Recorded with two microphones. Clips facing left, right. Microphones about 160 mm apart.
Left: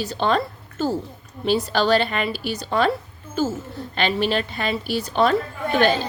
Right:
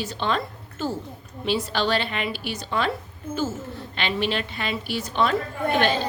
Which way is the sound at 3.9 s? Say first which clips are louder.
Left 4 dB; 40° left (ahead or behind).